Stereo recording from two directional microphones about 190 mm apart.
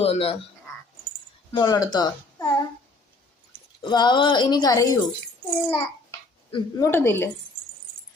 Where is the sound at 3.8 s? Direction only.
25° left (ahead or behind).